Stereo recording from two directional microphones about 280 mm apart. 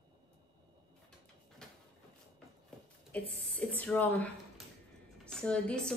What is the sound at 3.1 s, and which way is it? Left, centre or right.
Speech, centre.